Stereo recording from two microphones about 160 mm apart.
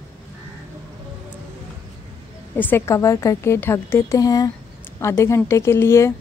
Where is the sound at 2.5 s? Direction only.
10° left (ahead or behind).